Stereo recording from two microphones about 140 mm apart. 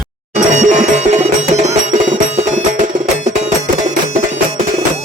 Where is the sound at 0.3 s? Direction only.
60° right (ahead or behind).